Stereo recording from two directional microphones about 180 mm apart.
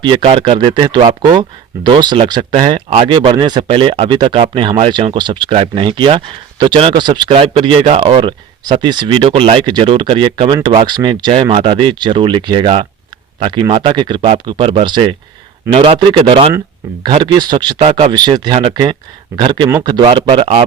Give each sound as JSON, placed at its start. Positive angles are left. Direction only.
{"t": 0.0, "sound": "speech", "side_deg": -25}
{"t": 17.7, "sound": "speech", "side_deg": -35}
{"t": 18.1, "sound": "speech", "side_deg": -25}